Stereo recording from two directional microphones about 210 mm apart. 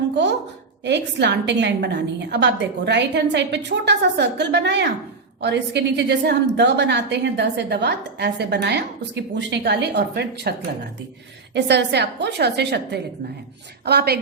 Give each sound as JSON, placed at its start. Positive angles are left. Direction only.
{"t": 0.9, "sound": "a woman's voice", "side_deg": -55}
{"t": 11.5, "sound": "a woman's voice", "side_deg": -55}